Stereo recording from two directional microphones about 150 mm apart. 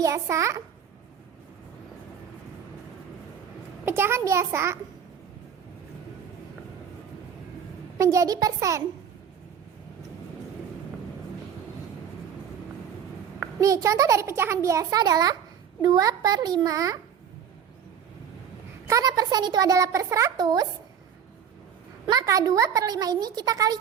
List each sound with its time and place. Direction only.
0.0 s a child's voice: 20° right (ahead or behind)
3.8 s a child's voice: 15° right (ahead or behind)
7.9 s a child's voice: 20° right (ahead or behind)
13.6 s a child's voice: 20° right (ahead or behind)
18.9 s a child's voice: 25° right (ahead or behind)
22.0 s a child's voice: 25° right (ahead or behind)